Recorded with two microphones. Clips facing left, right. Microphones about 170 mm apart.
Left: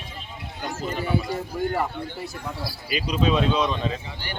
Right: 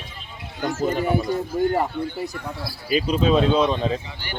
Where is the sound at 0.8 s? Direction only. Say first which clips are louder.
Right 7 dB; 40° right (ahead or behind).